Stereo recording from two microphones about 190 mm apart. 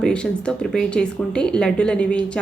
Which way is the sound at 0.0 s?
5° left (ahead or behind).